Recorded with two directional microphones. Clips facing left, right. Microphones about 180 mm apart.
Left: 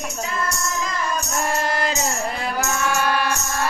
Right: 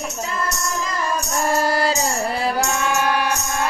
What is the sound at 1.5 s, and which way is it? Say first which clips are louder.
Music: right 5 dB; 40° right (ahead or behind).